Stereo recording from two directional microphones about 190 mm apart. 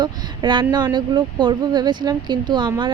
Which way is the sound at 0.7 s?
25° right (ahead or behind).